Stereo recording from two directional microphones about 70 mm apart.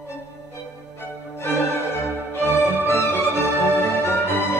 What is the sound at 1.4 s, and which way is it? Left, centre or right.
Music, left.